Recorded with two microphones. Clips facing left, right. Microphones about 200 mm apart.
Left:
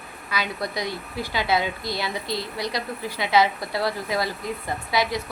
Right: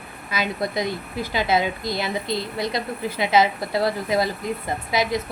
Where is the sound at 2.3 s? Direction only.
25° right (ahead or behind).